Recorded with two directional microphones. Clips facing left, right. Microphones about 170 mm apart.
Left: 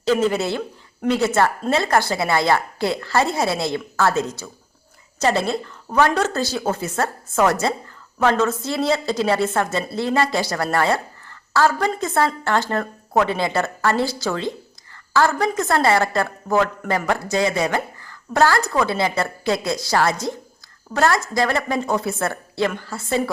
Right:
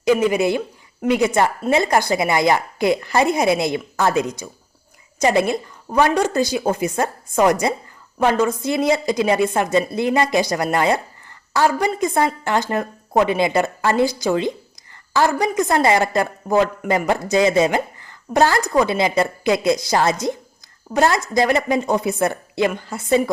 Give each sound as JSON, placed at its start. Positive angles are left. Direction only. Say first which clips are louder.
{"t": 0.0, "sound": "a woman's voice", "louder": "right 3 dB", "side_deg": -10}